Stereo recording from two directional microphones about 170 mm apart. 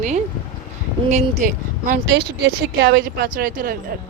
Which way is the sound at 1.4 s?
50° right (ahead or behind).